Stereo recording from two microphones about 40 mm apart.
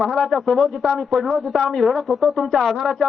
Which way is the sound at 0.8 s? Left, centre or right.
Centre.